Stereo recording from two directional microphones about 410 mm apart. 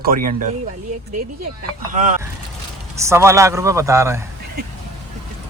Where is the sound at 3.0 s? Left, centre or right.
Centre.